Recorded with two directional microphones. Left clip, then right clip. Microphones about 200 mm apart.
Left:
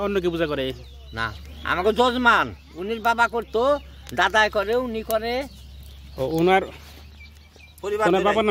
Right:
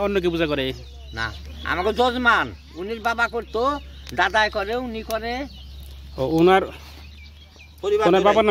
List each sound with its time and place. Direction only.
0.0 s a man's voice: centre (ahead or behind)
1.1 s speech: 55° left (ahead or behind)
6.1 s a man's voice: 5° right (ahead or behind)
7.8 s speech: 40° right (ahead or behind)
8.1 s a man's voice: 15° right (ahead or behind)